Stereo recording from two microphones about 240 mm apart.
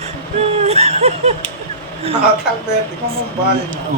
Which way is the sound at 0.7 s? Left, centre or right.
Right.